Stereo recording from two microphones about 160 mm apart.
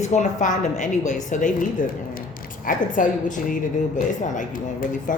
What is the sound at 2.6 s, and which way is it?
A woman's voice, 55° left (ahead or behind).